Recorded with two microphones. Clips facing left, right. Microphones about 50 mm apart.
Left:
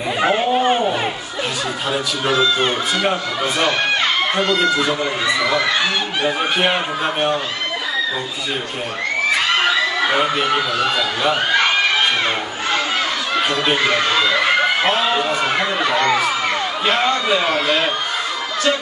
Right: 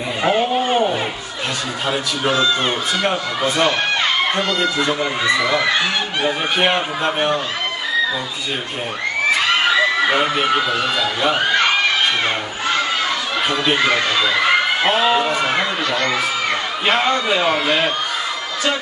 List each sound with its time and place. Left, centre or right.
0.2 s a sound: centre
1.9 s speech: centre
10.0 s a man's voice: centre
13.4 s a man's voice: centre
15.8 s speech: centre
16.8 s speech: centre